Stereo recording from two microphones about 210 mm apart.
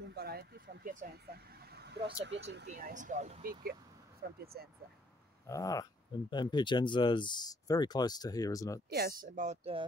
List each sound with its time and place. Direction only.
0.0 s speech: 50° right (ahead or behind); by 3.5 s 35° right (ahead or behind)
4.4 s speech: 45° right (ahead or behind)
5.5 s a sound: 15° left (ahead or behind)
6.3 s speech: 20° left (ahead or behind)
8.9 s speech: 45° right (ahead or behind)